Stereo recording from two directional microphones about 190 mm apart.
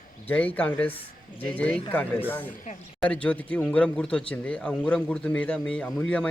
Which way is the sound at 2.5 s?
45° left (ahead or behind).